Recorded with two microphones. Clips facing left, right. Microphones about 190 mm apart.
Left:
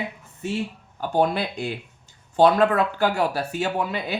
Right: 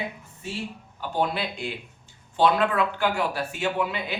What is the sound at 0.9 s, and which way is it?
Speech, 45° left (ahead or behind).